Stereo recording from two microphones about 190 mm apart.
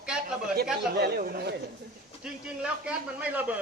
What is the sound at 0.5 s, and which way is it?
Speech, 55° right (ahead or behind).